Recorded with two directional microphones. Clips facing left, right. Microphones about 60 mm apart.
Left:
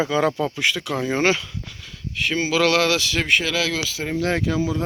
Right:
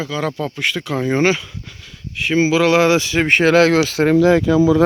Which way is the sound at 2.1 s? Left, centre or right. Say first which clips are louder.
Right 6 dB; centre.